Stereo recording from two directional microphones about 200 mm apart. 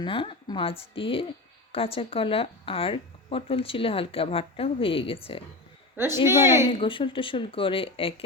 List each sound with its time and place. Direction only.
0.0 s speech: 25° left (ahead or behind)
6.2 s a woman's voice: 15° right (ahead or behind)
6.7 s speech: 25° left (ahead or behind)